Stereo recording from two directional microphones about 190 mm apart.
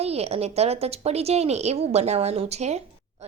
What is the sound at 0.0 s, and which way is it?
Speech, 35° right (ahead or behind).